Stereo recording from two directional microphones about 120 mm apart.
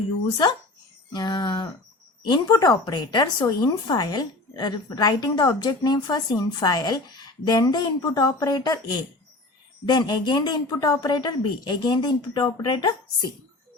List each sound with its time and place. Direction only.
1.1 s a woman's voice: 40° left (ahead or behind)
9.8 s a woman's voice: 35° left (ahead or behind)